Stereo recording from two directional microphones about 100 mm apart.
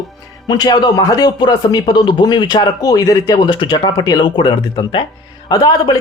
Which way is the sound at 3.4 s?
50° left (ahead or behind).